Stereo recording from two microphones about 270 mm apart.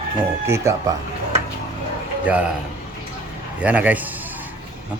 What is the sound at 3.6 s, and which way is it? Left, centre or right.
Speech, centre.